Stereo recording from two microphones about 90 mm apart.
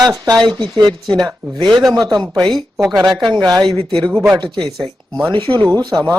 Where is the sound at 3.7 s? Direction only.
70° right (ahead or behind).